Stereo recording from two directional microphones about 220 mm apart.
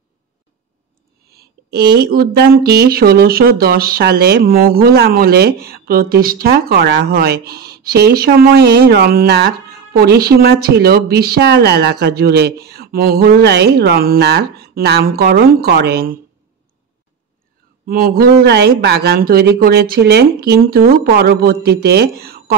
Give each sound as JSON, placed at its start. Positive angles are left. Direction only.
{"t": 1.3, "sound": "speech", "side_deg": -45}
{"t": 17.8, "sound": "speech", "side_deg": -45}